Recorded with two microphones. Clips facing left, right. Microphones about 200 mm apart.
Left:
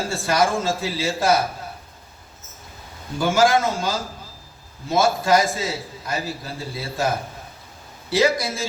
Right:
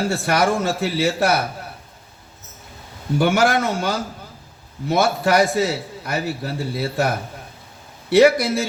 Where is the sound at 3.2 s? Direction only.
65° right (ahead or behind).